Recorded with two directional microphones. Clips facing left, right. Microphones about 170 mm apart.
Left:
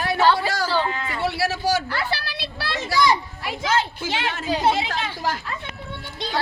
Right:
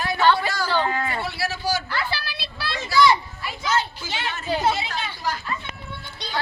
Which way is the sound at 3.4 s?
90° left.